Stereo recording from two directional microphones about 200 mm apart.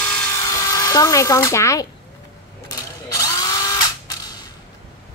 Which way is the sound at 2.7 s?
15° left (ahead or behind).